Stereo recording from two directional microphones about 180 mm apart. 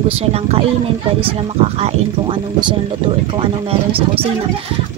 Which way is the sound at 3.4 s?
30° right (ahead or behind).